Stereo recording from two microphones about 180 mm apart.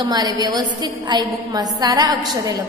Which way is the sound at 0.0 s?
20° right (ahead or behind).